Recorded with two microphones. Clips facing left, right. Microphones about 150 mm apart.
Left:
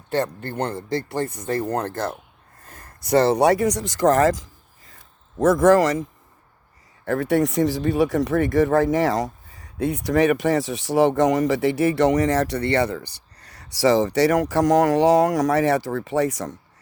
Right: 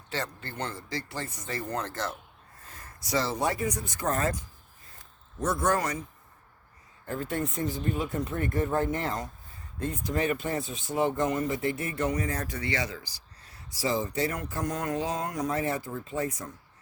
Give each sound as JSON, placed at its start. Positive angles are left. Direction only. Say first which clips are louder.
{"t": 0.1, "sound": "speech", "louder": "left 11 dB", "side_deg": 55}
{"t": 7.0, "sound": "speech", "louder": "left 11 dB", "side_deg": 75}